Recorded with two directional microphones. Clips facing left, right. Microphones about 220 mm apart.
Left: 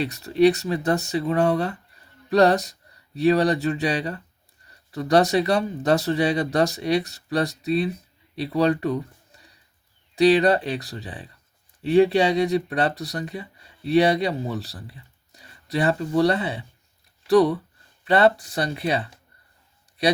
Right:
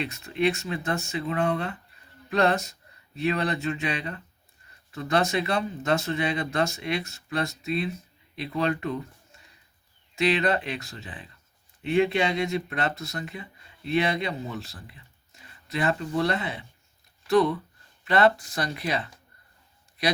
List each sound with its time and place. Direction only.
0.0 s speech: 35° left (ahead or behind)
10.2 s speech: 35° left (ahead or behind)